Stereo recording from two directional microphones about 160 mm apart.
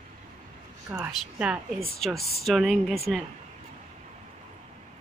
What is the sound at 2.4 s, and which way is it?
Speech, centre (ahead or behind).